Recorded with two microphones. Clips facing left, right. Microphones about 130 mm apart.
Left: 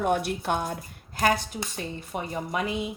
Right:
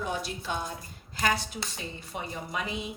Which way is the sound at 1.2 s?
50° left (ahead or behind).